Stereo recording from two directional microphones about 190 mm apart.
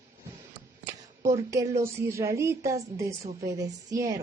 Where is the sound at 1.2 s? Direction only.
15° right (ahead or behind).